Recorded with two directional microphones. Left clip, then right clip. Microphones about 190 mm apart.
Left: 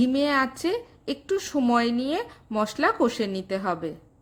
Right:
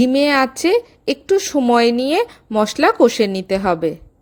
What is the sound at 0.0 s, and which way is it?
A woman's voice, 35° right (ahead or behind).